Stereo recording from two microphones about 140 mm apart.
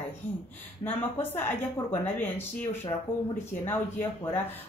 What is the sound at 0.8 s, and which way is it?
Speech, 40° left (ahead or behind).